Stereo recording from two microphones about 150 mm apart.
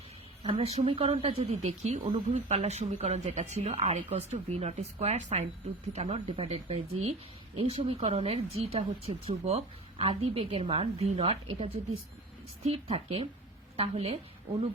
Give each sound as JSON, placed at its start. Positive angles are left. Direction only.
{"t": 0.4, "sound": "a woman's voice", "side_deg": -40}